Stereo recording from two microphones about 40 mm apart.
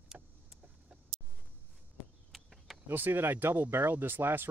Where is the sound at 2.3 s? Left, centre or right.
Centre.